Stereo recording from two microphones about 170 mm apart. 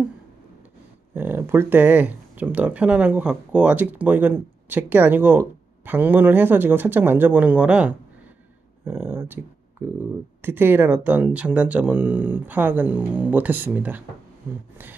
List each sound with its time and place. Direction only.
1.1 s speech: 10° right (ahead or behind)